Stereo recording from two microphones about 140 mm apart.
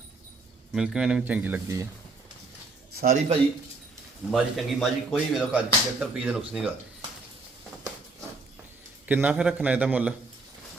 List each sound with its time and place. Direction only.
0.7 s speech: 5° right (ahead or behind)
2.9 s a man's voice: 90° right
4.3 s speech: centre (ahead or behind)
9.0 s speech: 10° right (ahead or behind)